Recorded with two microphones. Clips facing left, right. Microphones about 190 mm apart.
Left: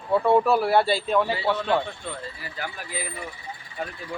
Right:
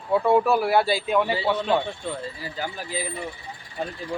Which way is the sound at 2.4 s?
25° right (ahead or behind).